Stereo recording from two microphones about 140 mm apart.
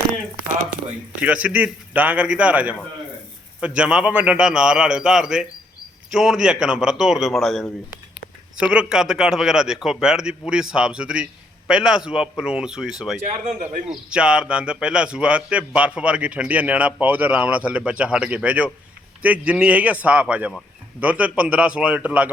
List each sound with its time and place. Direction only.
1.2 s a man's voice: 10° right (ahead or behind)
13.4 s a man's voice: 60° right (ahead or behind)
14.1 s a man's voice: 5° right (ahead or behind)